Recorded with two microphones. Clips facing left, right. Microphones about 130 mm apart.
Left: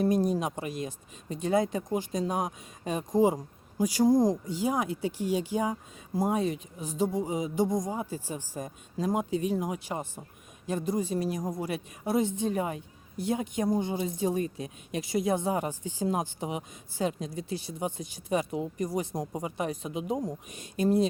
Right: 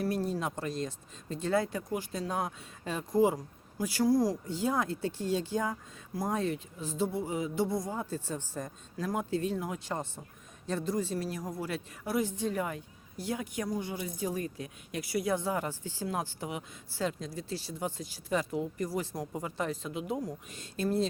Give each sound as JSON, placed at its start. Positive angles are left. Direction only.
{"t": 0.0, "sound": "speech", "side_deg": 15}